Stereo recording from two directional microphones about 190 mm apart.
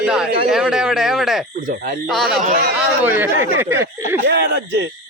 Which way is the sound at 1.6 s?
45° right (ahead or behind).